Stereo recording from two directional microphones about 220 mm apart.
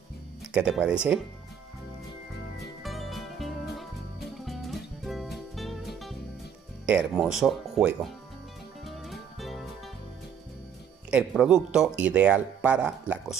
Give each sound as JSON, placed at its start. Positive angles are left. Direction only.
{"t": 0.5, "sound": "speech", "side_deg": -5}
{"t": 2.8, "sound": "music", "side_deg": 0}
{"t": 6.9, "sound": "speech", "side_deg": -5}
{"t": 8.8, "sound": "music", "side_deg": 0}
{"t": 11.1, "sound": "speech", "side_deg": -5}